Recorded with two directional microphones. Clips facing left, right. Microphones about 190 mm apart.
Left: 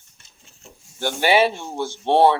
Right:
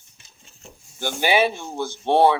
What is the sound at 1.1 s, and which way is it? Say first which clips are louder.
Speech: left 2 dB; 15° right (ahead or behind).